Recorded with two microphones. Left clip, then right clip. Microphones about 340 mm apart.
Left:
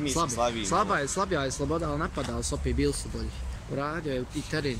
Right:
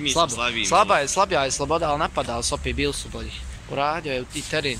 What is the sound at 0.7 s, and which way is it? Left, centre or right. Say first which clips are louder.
Speech: right 8 dB; centre.